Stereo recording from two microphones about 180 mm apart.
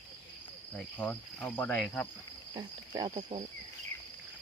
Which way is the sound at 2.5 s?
30° right (ahead or behind).